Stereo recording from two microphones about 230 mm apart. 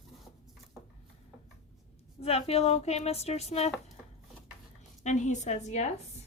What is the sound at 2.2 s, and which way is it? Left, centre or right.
Speech, left.